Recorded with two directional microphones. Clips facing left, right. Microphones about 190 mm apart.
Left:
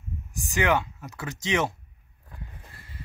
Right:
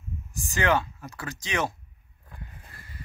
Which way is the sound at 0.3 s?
15° left (ahead or behind).